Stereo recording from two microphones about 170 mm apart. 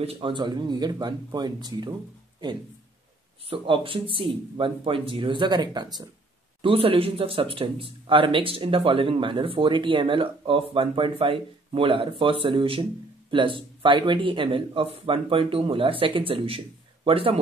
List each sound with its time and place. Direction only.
0.0 s speech: 30° right (ahead or behind)
3.4 s speech: 30° right (ahead or behind)